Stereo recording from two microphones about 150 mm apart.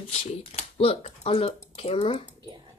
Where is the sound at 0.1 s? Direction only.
45° left (ahead or behind).